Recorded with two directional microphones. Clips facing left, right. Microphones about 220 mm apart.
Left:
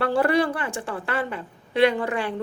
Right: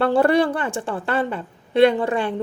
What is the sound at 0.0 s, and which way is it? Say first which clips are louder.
Speech: right 4 dB; 30° right (ahead or behind).